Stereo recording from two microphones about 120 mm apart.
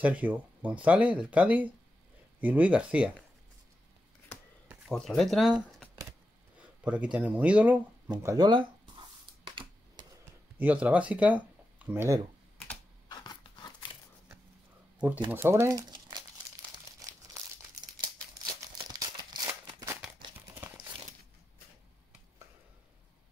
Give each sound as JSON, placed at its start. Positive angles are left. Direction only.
{"t": 0.0, "sound": "speech", "side_deg": -10}
{"t": 4.8, "sound": "speech", "side_deg": 5}
{"t": 8.2, "sound": "speech", "side_deg": -25}
{"t": 8.5, "sound": "a sound", "side_deg": -40}
{"t": 10.6, "sound": "speech", "side_deg": -10}
{"t": 13.1, "sound": "biting", "side_deg": 35}
{"t": 15.0, "sound": "speech", "side_deg": -15}
{"t": 17.0, "sound": "crumpling", "side_deg": -30}
{"t": 20.5, "sound": "crumpling", "side_deg": -20}